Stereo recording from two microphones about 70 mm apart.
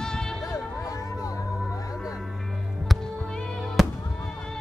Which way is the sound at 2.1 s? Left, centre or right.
Centre.